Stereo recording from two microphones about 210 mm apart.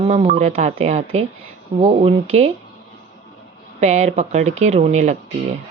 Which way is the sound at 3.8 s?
30° right (ahead or behind).